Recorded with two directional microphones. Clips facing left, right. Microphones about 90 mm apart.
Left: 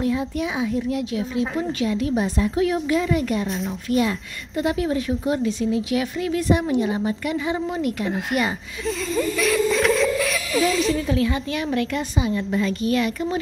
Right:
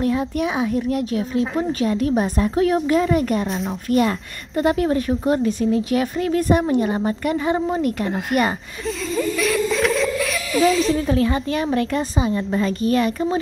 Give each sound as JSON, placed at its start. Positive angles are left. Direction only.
{"t": 0.0, "sound": "a woman's voice", "side_deg": -55}
{"t": 8.8, "sound": "speech", "side_deg": 0}
{"t": 11.0, "sound": "a woman's voice", "side_deg": -40}